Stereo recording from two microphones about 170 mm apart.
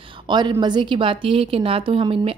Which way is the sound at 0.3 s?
25° right (ahead or behind).